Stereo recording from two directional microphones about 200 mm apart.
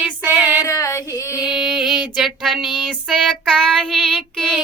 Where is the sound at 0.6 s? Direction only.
15° left (ahead or behind).